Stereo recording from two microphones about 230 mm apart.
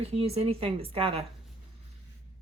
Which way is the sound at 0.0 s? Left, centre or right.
Right.